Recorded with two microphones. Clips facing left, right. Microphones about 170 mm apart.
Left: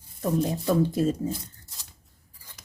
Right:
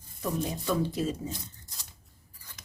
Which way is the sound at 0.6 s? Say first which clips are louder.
Left 5 dB; 45° left (ahead or behind).